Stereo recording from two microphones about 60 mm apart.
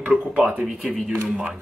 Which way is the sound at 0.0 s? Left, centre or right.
Right.